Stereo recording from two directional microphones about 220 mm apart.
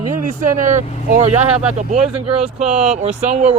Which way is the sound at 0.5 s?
35° right (ahead or behind).